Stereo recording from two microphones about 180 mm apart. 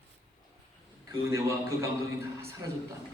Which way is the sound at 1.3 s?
15° right (ahead or behind).